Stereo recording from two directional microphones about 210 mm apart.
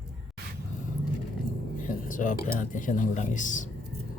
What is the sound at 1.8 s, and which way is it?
Speech, 40° left (ahead or behind).